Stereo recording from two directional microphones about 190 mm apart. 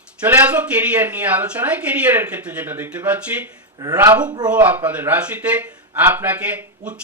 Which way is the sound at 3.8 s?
20° right (ahead or behind).